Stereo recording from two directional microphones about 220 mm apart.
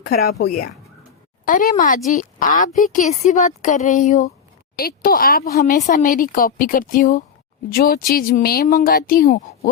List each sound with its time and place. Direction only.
0.1 s speech: 45° left (ahead or behind)